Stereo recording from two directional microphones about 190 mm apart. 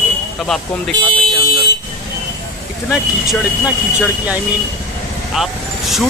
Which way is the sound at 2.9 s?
5° right (ahead or behind).